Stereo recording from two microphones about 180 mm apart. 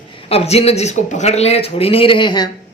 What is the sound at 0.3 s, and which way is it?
Speech, 35° left (ahead or behind).